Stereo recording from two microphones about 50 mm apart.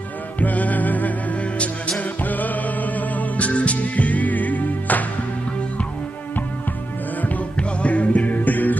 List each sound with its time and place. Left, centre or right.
0.4 s music: left
7.2 s music: left